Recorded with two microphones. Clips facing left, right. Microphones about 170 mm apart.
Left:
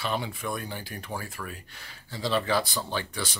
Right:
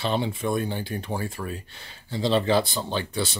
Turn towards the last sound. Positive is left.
turn(degrees=-25)  # may be behind; listen again after turning